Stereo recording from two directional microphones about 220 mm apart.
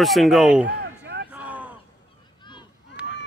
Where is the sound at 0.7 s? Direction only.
50° right (ahead or behind).